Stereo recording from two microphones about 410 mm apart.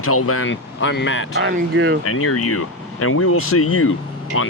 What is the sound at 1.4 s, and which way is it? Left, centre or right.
Speech, right.